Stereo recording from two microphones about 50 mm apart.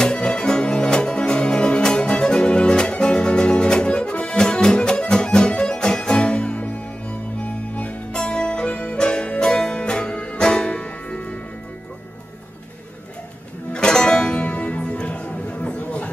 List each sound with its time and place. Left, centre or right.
0.0 s music: centre
13.7 s music: centre
14.4 s music: left